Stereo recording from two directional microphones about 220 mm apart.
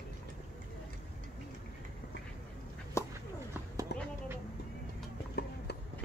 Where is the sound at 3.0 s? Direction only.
15° left (ahead or behind).